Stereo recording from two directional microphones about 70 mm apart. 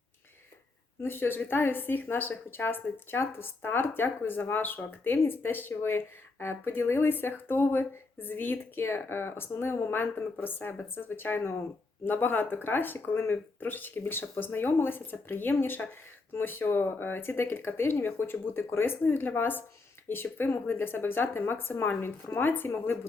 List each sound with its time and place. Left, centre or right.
1.0 s speech: left